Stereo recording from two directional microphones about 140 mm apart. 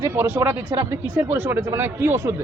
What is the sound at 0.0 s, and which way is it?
A man's voice, 20° right (ahead or behind).